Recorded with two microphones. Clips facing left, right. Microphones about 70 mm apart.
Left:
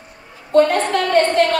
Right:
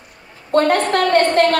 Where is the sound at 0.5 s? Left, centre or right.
Right.